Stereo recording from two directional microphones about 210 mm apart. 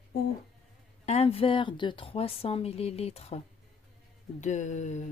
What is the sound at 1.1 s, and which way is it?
Speech, 30° left (ahead or behind).